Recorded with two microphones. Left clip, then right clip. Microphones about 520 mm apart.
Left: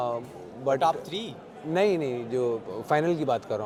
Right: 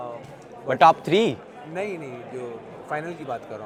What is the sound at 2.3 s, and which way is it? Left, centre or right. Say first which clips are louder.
A man's voice: left 9 dB; left.